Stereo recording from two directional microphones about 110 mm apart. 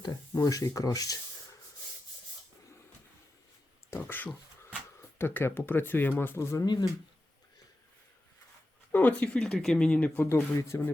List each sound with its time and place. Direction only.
0.0 s speech: 30° left (ahead or behind)
3.8 s a sound: 20° left (ahead or behind)
5.1 s speech: 20° left (ahead or behind)
8.9 s speech: 15° left (ahead or behind)
10.2 s speech: 25° left (ahead or behind)